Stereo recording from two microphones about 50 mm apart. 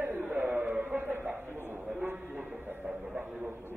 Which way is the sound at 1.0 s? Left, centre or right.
Right.